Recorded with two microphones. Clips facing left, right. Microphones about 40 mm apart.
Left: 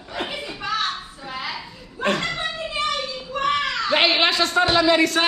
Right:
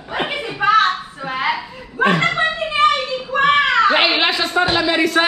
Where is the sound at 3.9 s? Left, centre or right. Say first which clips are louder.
Right 2 dB; centre.